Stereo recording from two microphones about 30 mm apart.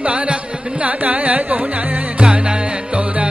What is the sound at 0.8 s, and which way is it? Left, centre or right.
Carnatic music, right.